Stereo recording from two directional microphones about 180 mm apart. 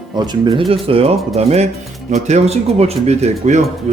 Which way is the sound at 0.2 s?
25° right (ahead or behind).